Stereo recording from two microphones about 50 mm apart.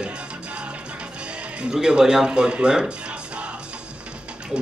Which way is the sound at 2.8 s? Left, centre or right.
Right.